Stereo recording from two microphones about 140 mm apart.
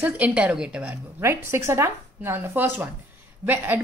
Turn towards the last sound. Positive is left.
turn(degrees=-15)  # may be behind; listen again after turning